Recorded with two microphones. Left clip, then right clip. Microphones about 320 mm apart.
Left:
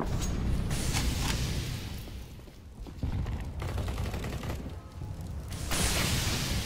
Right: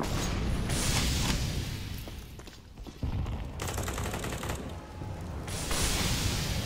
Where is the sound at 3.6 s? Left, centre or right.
Right.